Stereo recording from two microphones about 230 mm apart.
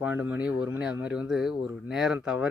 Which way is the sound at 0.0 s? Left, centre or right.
Centre.